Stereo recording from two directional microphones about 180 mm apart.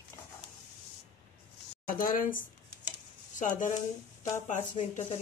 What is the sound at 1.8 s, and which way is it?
A woman's voice, 50° left (ahead or behind).